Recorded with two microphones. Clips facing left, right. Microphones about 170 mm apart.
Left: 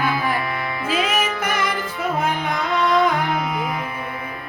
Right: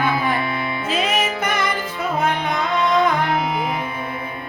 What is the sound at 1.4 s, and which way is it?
Music, 10° left (ahead or behind).